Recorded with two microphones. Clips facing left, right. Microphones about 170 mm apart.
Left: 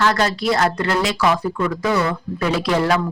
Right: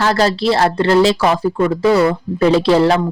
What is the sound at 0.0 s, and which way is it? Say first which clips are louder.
Speech: right 4 dB; 30° right (ahead or behind).